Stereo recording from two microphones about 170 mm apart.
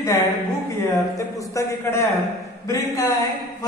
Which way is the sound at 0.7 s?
20° left (ahead or behind).